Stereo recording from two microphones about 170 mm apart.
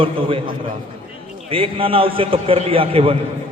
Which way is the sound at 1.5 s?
35° right (ahead or behind).